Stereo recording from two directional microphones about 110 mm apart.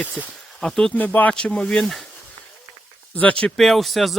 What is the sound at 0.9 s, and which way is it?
Speech, 15° left (ahead or behind).